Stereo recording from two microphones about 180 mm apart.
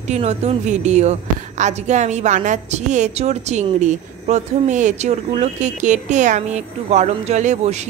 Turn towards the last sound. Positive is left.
turn(degrees=-40)  # may be behind; listen again after turning